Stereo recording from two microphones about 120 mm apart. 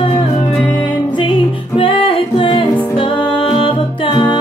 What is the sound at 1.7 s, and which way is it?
Music, 45° left (ahead or behind).